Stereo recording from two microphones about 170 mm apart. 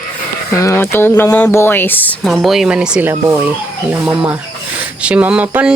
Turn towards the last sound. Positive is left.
turn(degrees=-5)  # may be behind; listen again after turning